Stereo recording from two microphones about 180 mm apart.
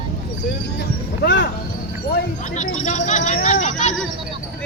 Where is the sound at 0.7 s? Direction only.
70° left (ahead or behind).